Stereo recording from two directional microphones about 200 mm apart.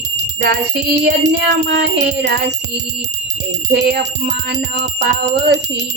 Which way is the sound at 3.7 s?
55° right (ahead or behind).